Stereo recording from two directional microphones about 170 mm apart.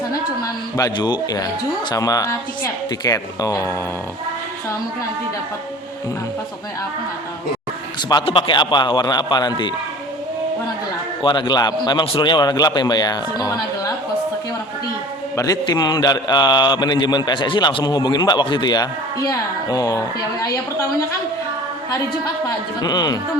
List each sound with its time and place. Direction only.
0.1 s a sound: 20° left (ahead or behind)
1.9 s a man's voice: 20° left (ahead or behind)
8.1 s a man's voice: 30° left (ahead or behind)
11.2 s a man's voice: 25° left (ahead or behind)
15.4 s a man's voice: 20° left (ahead or behind)
22.4 s a man's voice: 25° left (ahead or behind)